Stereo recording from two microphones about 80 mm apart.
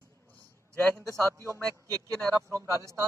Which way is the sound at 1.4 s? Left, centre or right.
Right.